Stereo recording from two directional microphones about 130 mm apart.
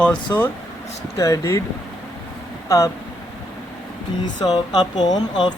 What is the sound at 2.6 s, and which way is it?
Speech, 25° left (ahead or behind).